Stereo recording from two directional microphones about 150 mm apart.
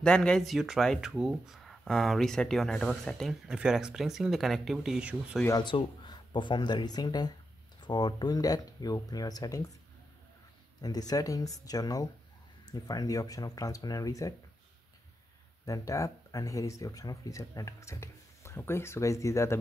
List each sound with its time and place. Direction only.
0.0 s speech: 5° left (ahead or behind)
5.6 s speech: 30° left (ahead or behind)
10.8 s speech: 25° left (ahead or behind)
15.6 s speech: 20° left (ahead or behind)